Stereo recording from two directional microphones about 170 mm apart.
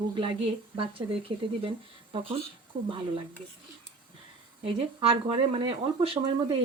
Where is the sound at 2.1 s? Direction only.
30° right (ahead or behind).